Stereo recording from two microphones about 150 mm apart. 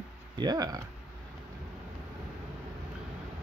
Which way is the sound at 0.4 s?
25° right (ahead or behind).